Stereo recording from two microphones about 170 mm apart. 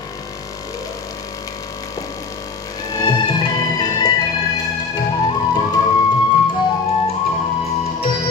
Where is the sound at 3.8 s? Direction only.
25° left (ahead or behind).